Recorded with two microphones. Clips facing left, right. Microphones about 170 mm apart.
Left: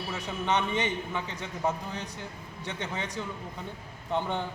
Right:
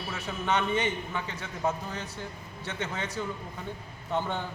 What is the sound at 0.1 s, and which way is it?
A man's voice, 15° left (ahead or behind).